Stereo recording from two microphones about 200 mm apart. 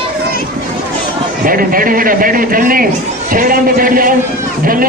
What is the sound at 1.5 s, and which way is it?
A man's voice, 45° right (ahead or behind).